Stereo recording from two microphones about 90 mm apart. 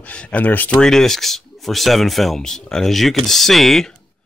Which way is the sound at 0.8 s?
5° left (ahead or behind).